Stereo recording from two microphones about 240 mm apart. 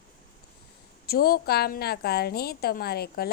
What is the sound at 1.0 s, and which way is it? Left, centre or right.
A woman's voice, left.